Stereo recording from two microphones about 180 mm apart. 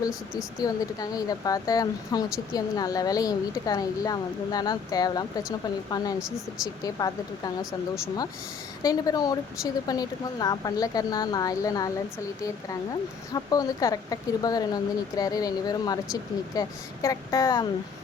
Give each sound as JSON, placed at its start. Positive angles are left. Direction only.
{"t": 0.6, "sound": "speech", "side_deg": 20}
{"t": 13.3, "sound": "speech", "side_deg": 20}